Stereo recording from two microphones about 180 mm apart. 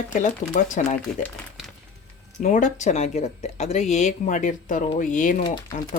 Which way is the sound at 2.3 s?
45° left (ahead or behind).